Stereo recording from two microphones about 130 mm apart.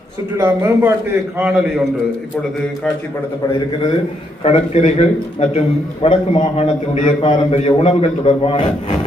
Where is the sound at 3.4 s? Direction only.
30° left (ahead or behind).